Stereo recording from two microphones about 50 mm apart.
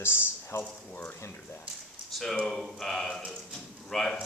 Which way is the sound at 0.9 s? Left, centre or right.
Left.